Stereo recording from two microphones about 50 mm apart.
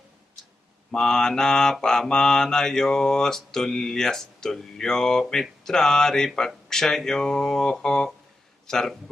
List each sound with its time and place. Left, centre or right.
0.9 s mantra: centre
8.6 s speech: centre